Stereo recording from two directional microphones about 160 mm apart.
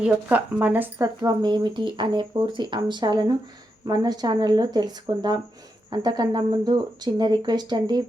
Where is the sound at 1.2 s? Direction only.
25° right (ahead or behind).